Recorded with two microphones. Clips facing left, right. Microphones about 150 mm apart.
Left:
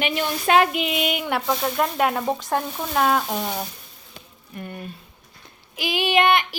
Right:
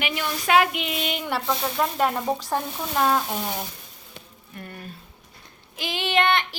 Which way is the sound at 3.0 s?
5° left (ahead or behind).